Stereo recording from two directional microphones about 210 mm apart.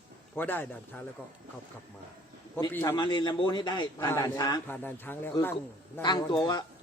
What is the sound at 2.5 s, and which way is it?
Speech, 10° left (ahead or behind).